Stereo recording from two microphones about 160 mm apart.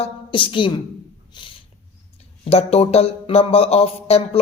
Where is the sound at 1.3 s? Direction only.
30° left (ahead or behind).